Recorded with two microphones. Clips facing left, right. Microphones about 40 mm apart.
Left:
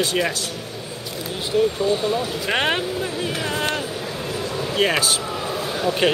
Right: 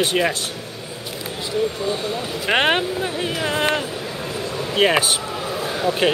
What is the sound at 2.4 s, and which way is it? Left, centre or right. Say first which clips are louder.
Speech: right 6 dB; right.